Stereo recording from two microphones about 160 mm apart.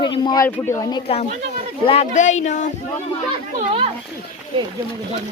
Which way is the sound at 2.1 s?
50° left (ahead or behind).